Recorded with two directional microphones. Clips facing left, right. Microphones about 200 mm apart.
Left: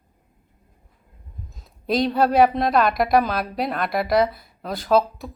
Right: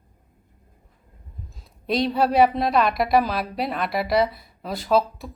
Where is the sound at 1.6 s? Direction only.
Centre (ahead or behind).